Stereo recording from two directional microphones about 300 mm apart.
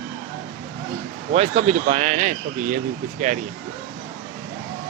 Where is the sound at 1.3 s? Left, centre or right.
Right.